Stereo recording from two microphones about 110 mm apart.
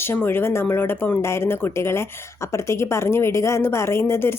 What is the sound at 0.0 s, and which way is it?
A woman's voice, 20° left (ahead or behind).